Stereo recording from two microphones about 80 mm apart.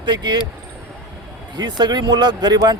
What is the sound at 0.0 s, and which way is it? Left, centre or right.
Speech, right.